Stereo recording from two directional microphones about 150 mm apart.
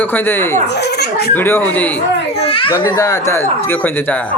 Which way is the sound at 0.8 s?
90° left.